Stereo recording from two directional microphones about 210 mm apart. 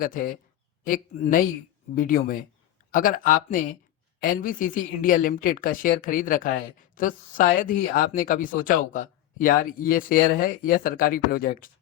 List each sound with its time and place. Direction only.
0.0 s speech: 40° left (ahead or behind)